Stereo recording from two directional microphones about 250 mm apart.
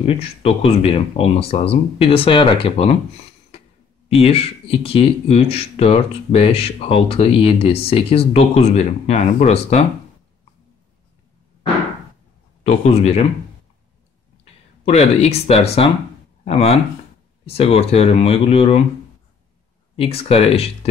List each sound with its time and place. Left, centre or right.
0.0 s speech: left
4.1 s speech: left
12.6 s speech: left
14.4 s speech: left
20.0 s speech: left